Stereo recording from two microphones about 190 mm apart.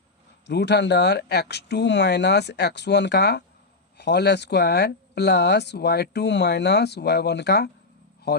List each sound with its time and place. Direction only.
0.4 s speech: 65° left (ahead or behind)